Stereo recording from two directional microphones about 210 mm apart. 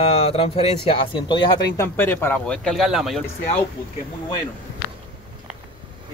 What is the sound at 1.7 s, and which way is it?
Speech, 10° left (ahead or behind).